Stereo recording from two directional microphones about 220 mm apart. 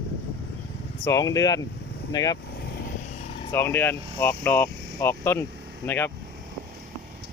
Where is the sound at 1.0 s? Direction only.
15° left (ahead or behind).